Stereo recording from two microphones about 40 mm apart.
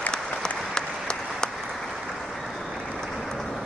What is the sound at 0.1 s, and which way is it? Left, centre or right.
Applause, centre.